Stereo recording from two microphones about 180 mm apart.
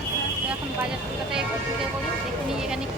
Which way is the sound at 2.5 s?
5° right (ahead or behind).